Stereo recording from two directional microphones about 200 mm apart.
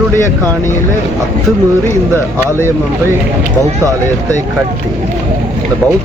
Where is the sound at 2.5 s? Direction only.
10° right (ahead or behind).